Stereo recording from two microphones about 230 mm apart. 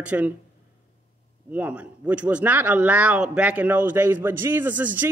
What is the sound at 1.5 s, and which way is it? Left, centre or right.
A man's voice, centre.